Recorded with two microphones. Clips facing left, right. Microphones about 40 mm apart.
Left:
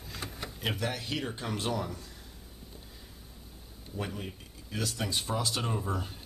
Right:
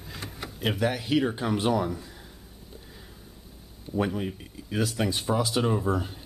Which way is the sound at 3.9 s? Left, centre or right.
Right.